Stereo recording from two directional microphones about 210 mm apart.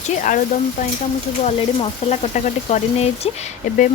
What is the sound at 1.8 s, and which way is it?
Speech, 30° left (ahead or behind).